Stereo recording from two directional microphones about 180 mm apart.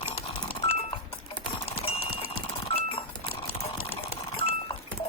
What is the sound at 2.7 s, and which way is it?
Goat, 30° left (ahead or behind).